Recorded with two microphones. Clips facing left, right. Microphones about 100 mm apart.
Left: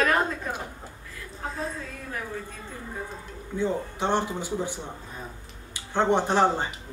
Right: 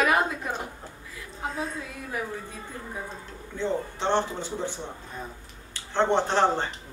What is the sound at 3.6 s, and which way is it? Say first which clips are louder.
Speech: left 1 dB; 10° left (ahead or behind).